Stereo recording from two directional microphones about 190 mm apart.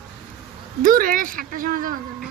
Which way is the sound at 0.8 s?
45° right (ahead or behind).